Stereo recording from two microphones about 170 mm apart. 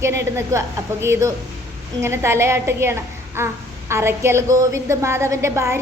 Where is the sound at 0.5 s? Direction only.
20° right (ahead or behind).